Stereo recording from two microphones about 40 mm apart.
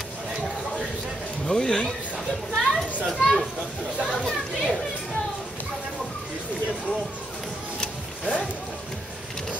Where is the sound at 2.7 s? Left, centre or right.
Centre.